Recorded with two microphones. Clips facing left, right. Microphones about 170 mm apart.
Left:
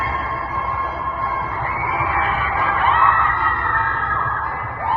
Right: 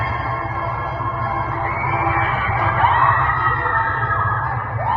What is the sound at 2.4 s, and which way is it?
Music, 35° right (ahead or behind).